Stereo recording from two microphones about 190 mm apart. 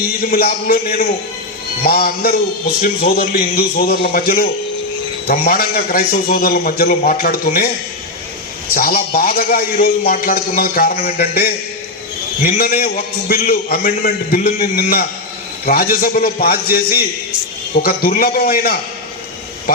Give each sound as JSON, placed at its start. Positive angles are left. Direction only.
{"t": 0.2, "sound": "a man's voice", "side_deg": 50}
{"t": 8.7, "sound": "a man's voice", "side_deg": 50}
{"t": 17.8, "sound": "a man's voice", "side_deg": 50}